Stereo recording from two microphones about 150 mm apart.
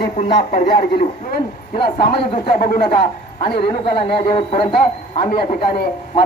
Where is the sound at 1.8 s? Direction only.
35° left (ahead or behind).